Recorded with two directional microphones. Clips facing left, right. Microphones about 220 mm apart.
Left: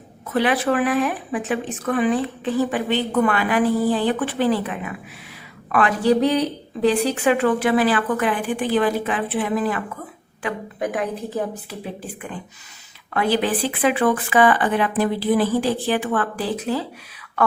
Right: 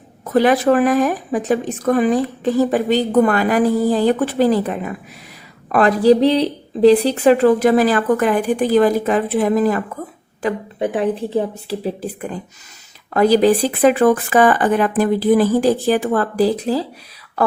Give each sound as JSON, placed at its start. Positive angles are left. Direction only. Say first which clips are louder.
{"t": 0.3, "sound": "speech", "louder": "right 6 dB", "side_deg": -40}
{"t": 10.4, "sound": "a woman's voice", "louder": "right 5 dB", "side_deg": -30}